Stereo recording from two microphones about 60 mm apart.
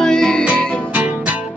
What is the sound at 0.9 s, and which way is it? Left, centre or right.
Music, right.